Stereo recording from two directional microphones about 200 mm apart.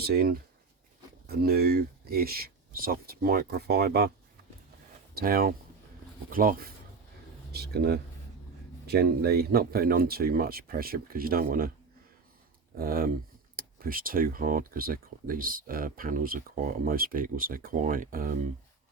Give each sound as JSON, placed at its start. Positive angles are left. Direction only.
{"t": 0.0, "sound": "speech", "side_deg": -50}
{"t": 5.1, "sound": "speech", "side_deg": -45}
{"t": 12.7, "sound": "speech", "side_deg": -45}